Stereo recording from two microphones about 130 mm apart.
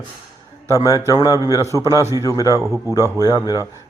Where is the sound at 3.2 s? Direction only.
30° left (ahead or behind).